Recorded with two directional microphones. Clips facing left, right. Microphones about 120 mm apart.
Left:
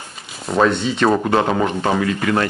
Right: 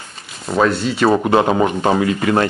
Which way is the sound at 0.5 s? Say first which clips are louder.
Even; 5° right (ahead or behind).